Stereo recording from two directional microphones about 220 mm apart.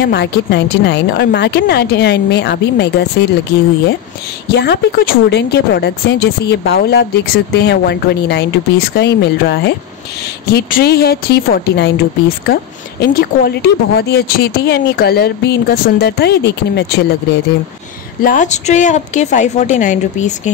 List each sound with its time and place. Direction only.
0.0 s speech: 50° left (ahead or behind)
4.6 s speech: 45° left (ahead or behind)
13.0 s speech: 45° left (ahead or behind)
18.2 s a woman's voice: 35° left (ahead or behind)